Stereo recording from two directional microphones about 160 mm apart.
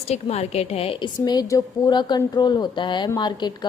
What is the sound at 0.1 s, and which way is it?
A woman's voice, 40° left (ahead or behind).